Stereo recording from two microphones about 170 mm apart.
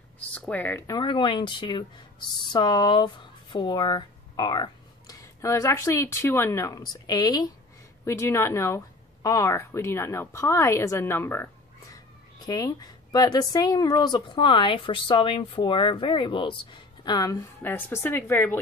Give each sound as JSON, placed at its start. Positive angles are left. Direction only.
{"t": 0.3, "sound": "a woman's voice", "side_deg": 10}